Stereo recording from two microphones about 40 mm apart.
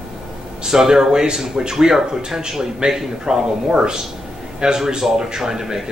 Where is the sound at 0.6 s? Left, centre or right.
Centre.